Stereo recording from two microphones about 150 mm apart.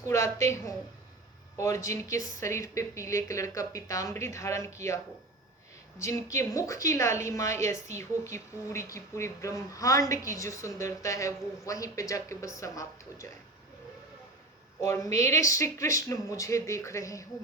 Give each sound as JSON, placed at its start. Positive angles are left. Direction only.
{"t": 0.0, "sound": "a woman's voice", "side_deg": 20}
{"t": 6.0, "sound": "a woman's voice", "side_deg": 20}
{"t": 14.8, "sound": "a woman's voice", "side_deg": 20}